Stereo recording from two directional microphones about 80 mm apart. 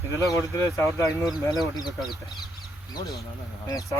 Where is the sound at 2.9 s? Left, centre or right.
Left.